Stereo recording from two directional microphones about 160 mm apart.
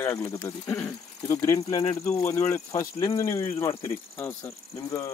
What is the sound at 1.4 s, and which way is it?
Speech, 25° left (ahead or behind).